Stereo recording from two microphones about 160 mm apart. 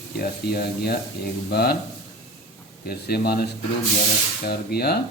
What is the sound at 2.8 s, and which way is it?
Speech, 75° left (ahead or behind).